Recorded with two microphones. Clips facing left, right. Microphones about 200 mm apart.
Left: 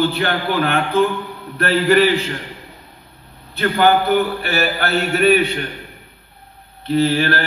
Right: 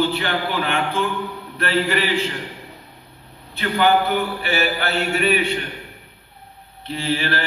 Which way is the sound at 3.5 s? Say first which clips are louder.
Left 3 dB; 45° left (ahead or behind).